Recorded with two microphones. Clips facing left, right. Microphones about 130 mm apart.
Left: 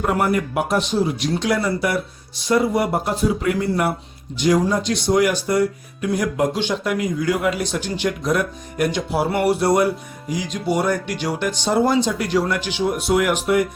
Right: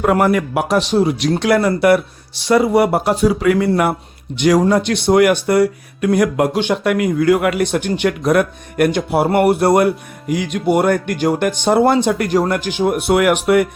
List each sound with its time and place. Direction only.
0.0 s a man's voice: 90° right
4.4 s speech: 70° right (ahead or behind)